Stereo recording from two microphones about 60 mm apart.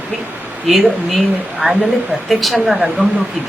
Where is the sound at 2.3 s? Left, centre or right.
Centre.